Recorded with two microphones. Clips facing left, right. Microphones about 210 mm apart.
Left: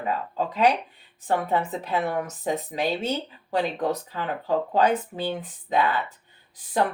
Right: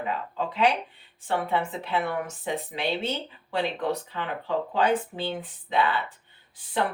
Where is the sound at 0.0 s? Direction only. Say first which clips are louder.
Left 3 dB; 40° left (ahead or behind).